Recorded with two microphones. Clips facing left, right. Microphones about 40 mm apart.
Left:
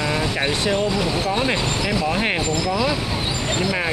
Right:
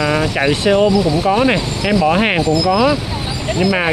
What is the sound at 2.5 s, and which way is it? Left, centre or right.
Speech, right.